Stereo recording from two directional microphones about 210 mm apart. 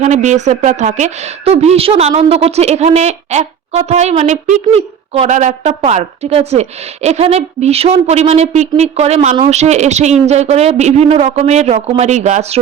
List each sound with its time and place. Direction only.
0.0 s a woman's voice: 35° right (ahead or behind)